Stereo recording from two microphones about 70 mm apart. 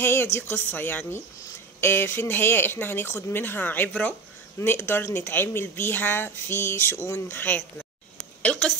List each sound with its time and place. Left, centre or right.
0.0 s a woman's voice: left
7.3 s a woman's voice: left
8.4 s a sound: centre